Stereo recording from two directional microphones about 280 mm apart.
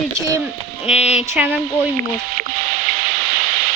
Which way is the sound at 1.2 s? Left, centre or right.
Centre.